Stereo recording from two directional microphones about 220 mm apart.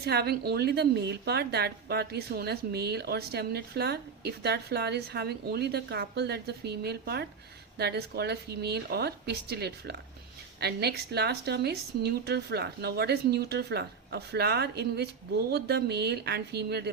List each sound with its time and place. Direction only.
0.0 s a woman's voice: 45° right (ahead or behind)